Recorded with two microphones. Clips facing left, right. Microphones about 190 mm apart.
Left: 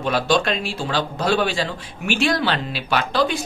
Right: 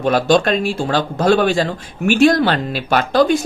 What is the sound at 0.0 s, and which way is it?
Speech, 45° right (ahead or behind).